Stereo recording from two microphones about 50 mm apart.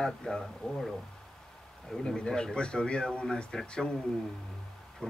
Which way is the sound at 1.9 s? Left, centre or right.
Centre.